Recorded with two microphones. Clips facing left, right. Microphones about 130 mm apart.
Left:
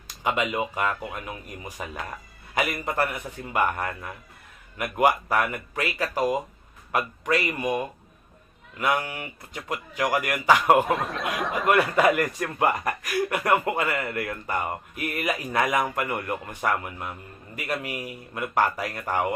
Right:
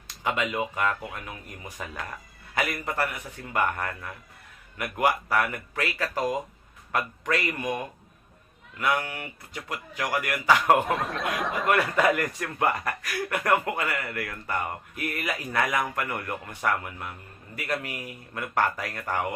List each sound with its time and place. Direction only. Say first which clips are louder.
0.2 s a man's voice: left 2 dB; 20° left (ahead or behind)
8.8 s speech: left 1 dB; 15° left (ahead or behind)
10.8 s speech: left 1 dB; centre (ahead or behind)
11.9 s speech: left 3 dB; 15° left (ahead or behind)